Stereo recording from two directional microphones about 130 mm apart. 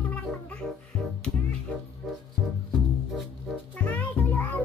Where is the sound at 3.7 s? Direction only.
10° left (ahead or behind).